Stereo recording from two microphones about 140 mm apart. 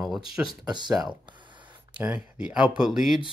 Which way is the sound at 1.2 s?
35° right (ahead or behind).